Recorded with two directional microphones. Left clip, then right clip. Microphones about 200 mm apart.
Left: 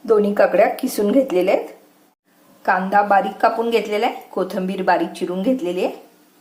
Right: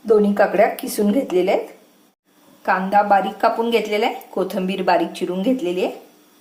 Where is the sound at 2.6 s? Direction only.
5° left (ahead or behind).